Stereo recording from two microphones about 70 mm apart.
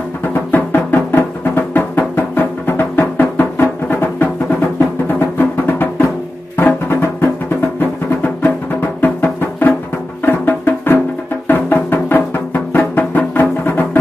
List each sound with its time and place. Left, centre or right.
0.3 s music: left
5.4 s music: left
9.0 s music: left